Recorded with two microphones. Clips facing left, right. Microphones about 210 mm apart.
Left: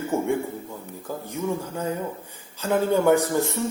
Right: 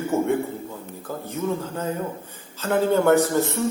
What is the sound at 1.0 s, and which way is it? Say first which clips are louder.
A man's voice: right 1 dB; 10° left (ahead or behind).